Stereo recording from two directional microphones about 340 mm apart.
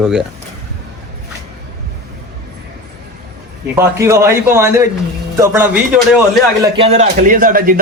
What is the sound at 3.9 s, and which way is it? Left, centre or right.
A man's voice, centre.